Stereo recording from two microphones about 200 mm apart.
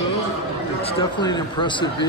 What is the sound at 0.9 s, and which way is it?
A man's voice, 20° left (ahead or behind).